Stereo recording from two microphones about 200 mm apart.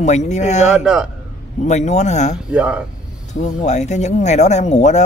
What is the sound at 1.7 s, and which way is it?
Speech, 35° left (ahead or behind).